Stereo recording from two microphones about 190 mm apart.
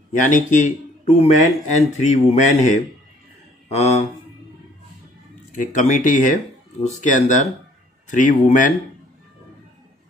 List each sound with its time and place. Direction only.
0.3 s speech: 40° left (ahead or behind)
5.5 s speech: 40° left (ahead or behind)